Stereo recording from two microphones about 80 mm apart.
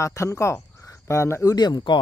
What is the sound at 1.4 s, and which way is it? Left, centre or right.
Speech, left.